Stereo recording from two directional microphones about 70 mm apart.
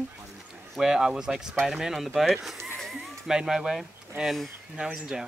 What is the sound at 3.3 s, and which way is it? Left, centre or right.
Speech, centre.